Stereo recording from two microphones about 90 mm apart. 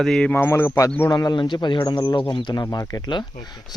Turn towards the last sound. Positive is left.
turn(degrees=45)  # may be behind; listen again after turning